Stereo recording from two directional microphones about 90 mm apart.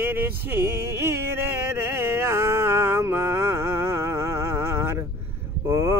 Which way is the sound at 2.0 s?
30° right (ahead or behind).